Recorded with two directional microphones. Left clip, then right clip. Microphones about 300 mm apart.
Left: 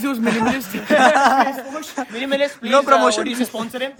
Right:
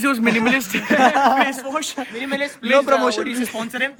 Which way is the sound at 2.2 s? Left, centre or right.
Left.